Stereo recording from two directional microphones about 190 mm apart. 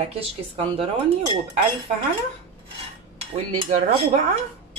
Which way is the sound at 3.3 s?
30° right (ahead or behind).